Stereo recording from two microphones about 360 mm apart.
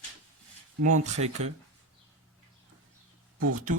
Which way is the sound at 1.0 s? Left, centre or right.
Centre.